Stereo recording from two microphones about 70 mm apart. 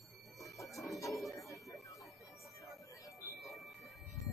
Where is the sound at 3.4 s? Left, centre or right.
Centre.